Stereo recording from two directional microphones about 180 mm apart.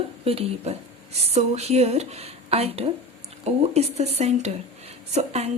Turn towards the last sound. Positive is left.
turn(degrees=-35)  # may be behind; listen again after turning